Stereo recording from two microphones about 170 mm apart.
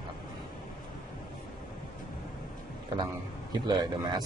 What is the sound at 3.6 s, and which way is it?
Speech, 25° right (ahead or behind).